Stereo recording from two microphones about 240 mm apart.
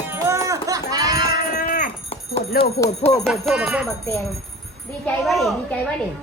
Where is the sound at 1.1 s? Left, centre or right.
Left.